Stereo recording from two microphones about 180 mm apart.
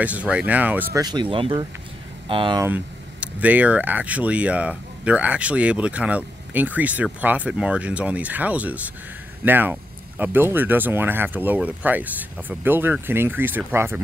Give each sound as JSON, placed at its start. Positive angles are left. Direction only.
{"t": 0.0, "sound": "speech", "side_deg": -10}
{"t": 1.0, "sound": "speech", "side_deg": -25}
{"t": 2.6, "sound": "speech", "side_deg": -10}